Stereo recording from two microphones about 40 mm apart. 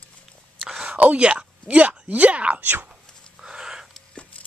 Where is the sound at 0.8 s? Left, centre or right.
Right.